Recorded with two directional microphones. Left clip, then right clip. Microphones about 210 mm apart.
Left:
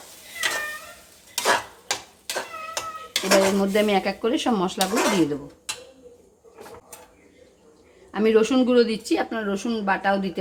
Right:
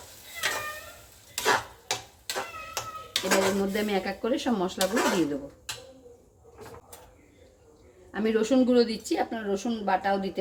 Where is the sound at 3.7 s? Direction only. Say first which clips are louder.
Left 8 dB; 35° left (ahead or behind).